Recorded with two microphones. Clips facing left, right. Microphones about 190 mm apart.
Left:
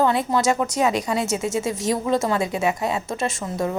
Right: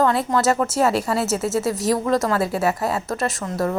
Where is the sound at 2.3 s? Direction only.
20° left (ahead or behind).